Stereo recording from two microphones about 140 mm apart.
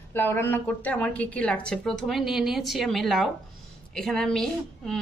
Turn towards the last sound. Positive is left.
turn(degrees=5)  # may be behind; listen again after turning